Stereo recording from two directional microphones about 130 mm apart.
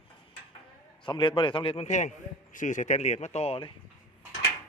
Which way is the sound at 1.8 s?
65° left (ahead or behind).